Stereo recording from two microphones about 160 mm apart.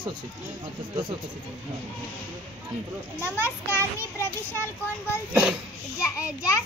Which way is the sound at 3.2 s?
15° left (ahead or behind).